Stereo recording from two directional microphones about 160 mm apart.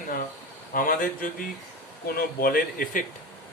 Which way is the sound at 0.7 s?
60° left (ahead or behind).